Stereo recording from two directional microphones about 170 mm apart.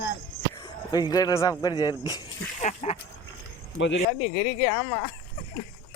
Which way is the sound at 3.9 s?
40° left (ahead or behind).